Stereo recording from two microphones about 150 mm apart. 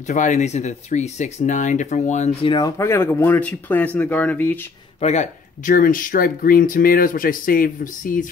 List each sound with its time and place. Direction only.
0.1 s speech: 55° left (ahead or behind)
2.4 s speech: 30° left (ahead or behind)
2.8 s speech: 15° left (ahead or behind)
5.0 s speech: 50° left (ahead or behind)
5.8 s speech: 65° left (ahead or behind)